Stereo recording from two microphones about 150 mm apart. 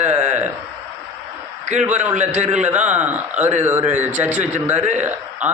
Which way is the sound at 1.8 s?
10° right (ahead or behind).